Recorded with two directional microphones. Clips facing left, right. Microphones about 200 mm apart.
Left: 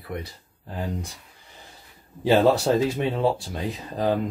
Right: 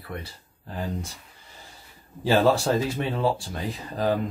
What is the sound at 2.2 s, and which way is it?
Speech, 20° left (ahead or behind).